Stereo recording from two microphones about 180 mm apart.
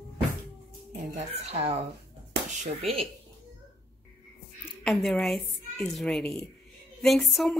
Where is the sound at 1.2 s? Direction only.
35° right (ahead or behind).